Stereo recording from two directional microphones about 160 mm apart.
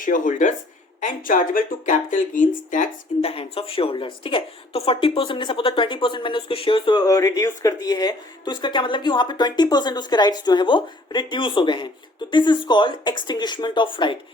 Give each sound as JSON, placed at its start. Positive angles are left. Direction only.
{"t": 0.0, "sound": "speech", "side_deg": 55}
{"t": 3.2, "sound": "a woman's voice", "side_deg": 40}